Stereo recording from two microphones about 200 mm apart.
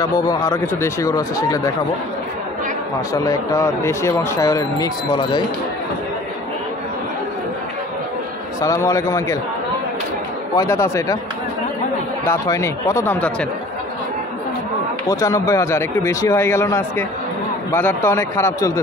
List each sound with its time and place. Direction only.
0.0 s speech: 15° left (ahead or behind)
3.1 s speech: 15° left (ahead or behind)
8.5 s speech: 15° left (ahead or behind)
10.5 s speech: 15° left (ahead or behind)
12.3 s speech: 15° left (ahead or behind)
15.0 s speech: 15° left (ahead or behind)